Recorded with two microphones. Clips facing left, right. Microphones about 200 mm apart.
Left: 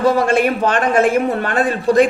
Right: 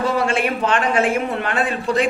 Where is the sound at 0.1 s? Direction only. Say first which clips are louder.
Left 5 dB; 40° left (ahead or behind).